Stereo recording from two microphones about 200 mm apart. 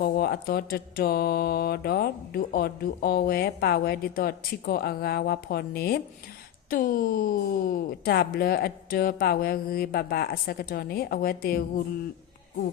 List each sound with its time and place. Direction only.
0.0 s mantra: 50° left (ahead or behind)